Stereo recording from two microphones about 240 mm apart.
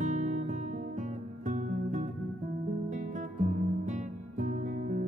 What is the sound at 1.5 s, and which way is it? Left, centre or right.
Music, right.